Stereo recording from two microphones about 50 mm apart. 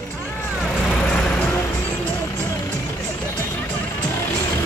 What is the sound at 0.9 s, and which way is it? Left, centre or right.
Vehicle, centre.